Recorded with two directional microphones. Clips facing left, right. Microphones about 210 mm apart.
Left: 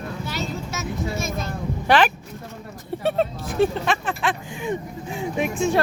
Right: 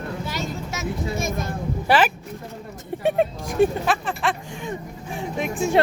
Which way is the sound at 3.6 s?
Centre (ahead or behind).